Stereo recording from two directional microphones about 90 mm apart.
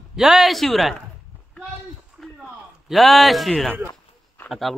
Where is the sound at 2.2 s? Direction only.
Centre (ahead or behind).